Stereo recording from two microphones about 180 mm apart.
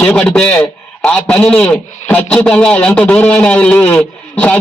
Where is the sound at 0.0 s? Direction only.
5° left (ahead or behind).